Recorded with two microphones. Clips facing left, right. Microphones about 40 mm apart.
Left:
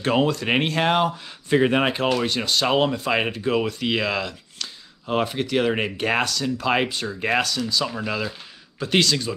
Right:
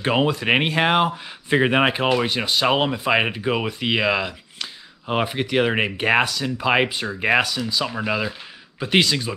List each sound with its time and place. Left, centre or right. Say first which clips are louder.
0.0 s speech: right 1 dB; centre